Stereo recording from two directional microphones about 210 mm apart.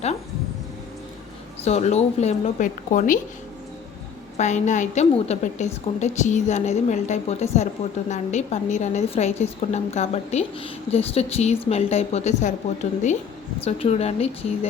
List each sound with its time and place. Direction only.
1.6 s a woman's voice: 30° left (ahead or behind)
4.4 s a woman's voice: 35° left (ahead or behind)